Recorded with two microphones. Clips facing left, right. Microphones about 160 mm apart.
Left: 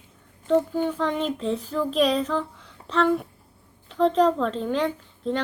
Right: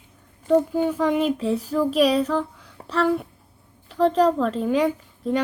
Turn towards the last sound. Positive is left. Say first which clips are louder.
# right 3 dB
turn(degrees=-10)  # may be behind; listen again after turning